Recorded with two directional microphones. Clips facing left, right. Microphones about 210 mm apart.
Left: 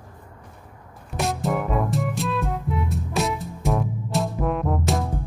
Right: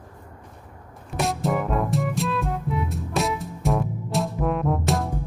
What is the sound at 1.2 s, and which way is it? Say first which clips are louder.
Music: even; centre (ahead or behind).